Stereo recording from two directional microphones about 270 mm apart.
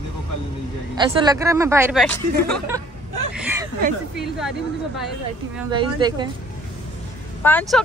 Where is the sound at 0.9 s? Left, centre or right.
Centre.